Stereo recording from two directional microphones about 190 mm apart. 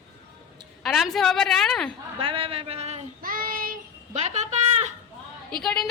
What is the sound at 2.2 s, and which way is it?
Speech, 30° right (ahead or behind).